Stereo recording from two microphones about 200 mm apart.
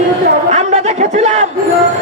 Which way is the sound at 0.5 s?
35° right (ahead or behind).